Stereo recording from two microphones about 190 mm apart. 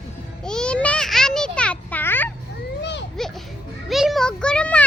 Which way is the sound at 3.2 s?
Centre (ahead or behind).